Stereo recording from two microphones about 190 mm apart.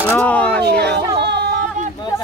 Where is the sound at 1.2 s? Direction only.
60° right (ahead or behind).